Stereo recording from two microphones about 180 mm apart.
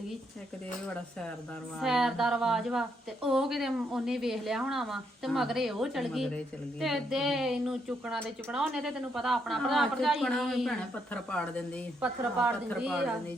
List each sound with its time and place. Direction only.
1.8 s a woman's voice: centre (ahead or behind)
12.0 s a woman's voice: 5° right (ahead or behind)